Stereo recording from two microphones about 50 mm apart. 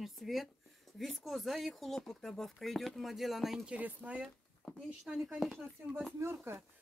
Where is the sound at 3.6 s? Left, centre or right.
Right.